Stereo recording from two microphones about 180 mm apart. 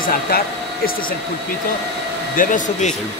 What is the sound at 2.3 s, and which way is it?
Speech, 45° left (ahead or behind).